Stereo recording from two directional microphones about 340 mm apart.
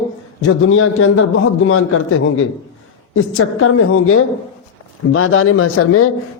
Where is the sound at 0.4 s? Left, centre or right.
Left.